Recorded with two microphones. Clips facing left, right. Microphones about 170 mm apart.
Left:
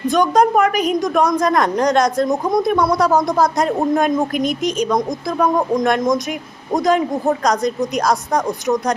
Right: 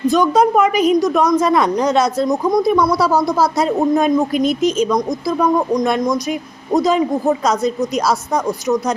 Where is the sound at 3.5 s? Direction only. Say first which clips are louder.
Right 2 dB; centre (ahead or behind).